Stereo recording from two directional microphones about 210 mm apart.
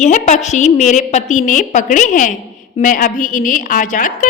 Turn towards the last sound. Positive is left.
turn(degrees=40)  # may be behind; listen again after turning